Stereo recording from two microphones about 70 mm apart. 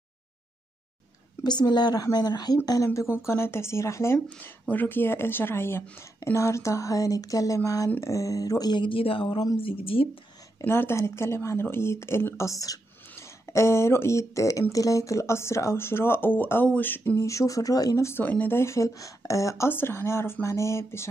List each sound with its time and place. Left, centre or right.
1.4 s a woman's voice: left
2.1 s speech: left
2.9 s speech: left
4.4 s speech: left
10.7 s speech: left
12.4 s speech: left
13.5 s speech: left
16.6 s a sound: left
17.2 s speech: left
18.2 s speech: left
19.7 s speech: left